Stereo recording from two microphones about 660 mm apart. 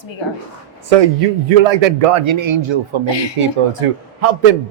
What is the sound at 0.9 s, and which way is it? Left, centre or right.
A man's voice, right.